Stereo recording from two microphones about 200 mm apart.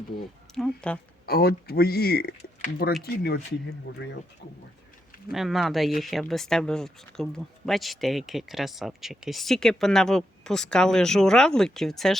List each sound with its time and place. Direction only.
0.5 s speech: 5° left (ahead or behind)
1.3 s speech: 50° left (ahead or behind)
3.9 s speech: 60° left (ahead or behind)
5.3 s speech: centre (ahead or behind)